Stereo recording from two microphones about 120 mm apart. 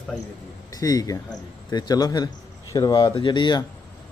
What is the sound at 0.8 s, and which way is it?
Speech, 30° left (ahead or behind).